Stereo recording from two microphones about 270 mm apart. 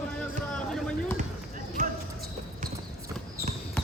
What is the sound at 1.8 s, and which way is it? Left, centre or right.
Basketball bounce, right.